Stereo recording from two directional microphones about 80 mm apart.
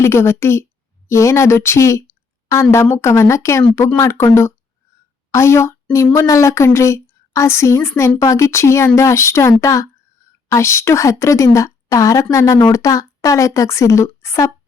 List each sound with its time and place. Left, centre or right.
0.0 s a woman's voice: left
5.3 s a woman's voice: left